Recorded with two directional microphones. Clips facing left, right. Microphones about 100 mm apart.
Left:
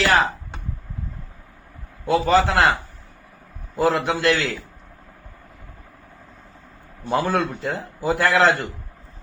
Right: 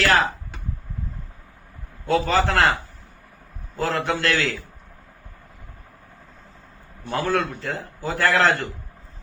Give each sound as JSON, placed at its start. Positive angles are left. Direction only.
{"t": 0.0, "sound": "a sound", "side_deg": 10}
{"t": 2.0, "sound": "a man's voice", "side_deg": 15}
{"t": 3.8, "sound": "a man's voice", "side_deg": 10}
{"t": 7.1, "sound": "a man's voice", "side_deg": 15}